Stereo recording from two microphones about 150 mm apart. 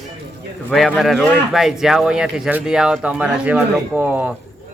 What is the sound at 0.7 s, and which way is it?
Speech, centre (ahead or behind).